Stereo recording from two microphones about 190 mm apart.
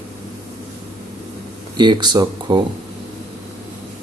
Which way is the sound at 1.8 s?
25° right (ahead or behind).